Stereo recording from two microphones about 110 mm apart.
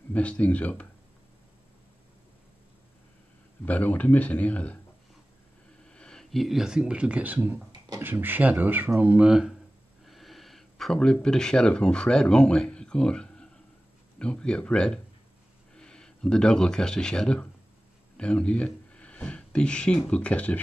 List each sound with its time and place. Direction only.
0.1 s speech: 10° left (ahead or behind)
3.6 s speech: 15° left (ahead or behind)
5.9 s speech: 5° left (ahead or behind)